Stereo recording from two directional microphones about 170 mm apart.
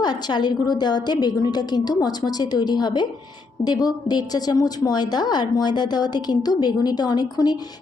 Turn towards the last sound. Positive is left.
turn(degrees=25)  # may be behind; listen again after turning